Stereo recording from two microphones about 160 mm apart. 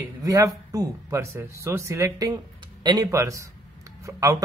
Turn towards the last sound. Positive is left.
turn(degrees=-20)  # may be behind; listen again after turning